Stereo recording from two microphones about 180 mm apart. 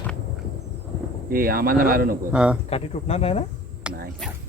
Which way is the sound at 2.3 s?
5° right (ahead or behind).